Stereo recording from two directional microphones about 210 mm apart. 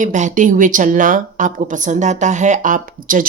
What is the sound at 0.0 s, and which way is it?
A woman's voice, 35° right (ahead or behind).